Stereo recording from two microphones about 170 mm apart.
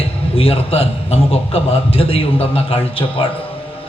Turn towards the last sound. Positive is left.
turn(degrees=35)  # may be behind; listen again after turning